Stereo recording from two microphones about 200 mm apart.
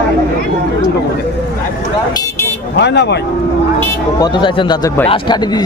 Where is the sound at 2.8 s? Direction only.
60° left (ahead or behind).